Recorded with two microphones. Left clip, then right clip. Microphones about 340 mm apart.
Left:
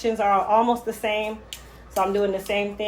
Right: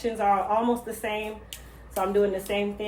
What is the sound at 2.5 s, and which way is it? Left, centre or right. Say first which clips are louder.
Speech: left 3 dB; left.